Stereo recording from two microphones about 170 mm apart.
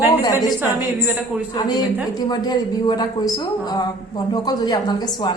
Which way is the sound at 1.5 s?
25° left (ahead or behind).